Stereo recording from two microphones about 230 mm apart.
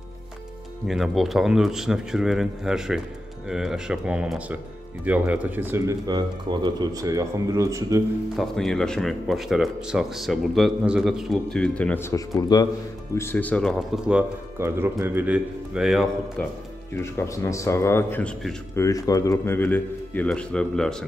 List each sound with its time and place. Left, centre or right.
0.8 s speech: centre
8.4 s speech: centre
16.9 s speech: centre
18.9 s speech: centre